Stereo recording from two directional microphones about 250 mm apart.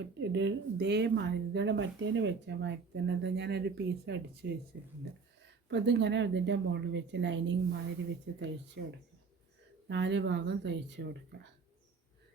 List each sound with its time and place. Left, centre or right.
0.2 s speech: right
5.6 s speech: right
9.9 s speech: right